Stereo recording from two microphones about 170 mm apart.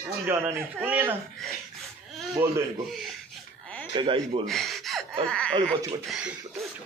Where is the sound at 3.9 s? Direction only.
30° right (ahead or behind).